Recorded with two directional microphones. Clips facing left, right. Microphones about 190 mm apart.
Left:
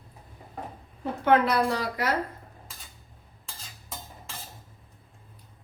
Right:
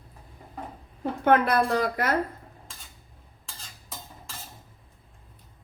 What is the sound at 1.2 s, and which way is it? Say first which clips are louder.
Speech: right 1 dB; 55° right (ahead or behind).